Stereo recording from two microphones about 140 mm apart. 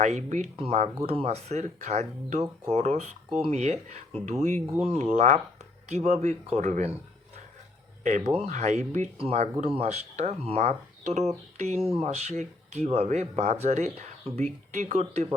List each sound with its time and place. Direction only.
0.0 s speech: 55° right (ahead or behind)
0.5 s speech: 45° right (ahead or behind)
8.4 s speech: 60° right (ahead or behind)